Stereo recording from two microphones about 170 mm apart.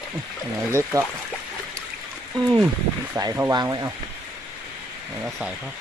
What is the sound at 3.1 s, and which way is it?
Speech, 20° right (ahead or behind).